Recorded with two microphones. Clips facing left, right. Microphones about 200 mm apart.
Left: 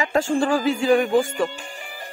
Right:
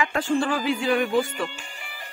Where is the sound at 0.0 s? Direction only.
40° left (ahead or behind).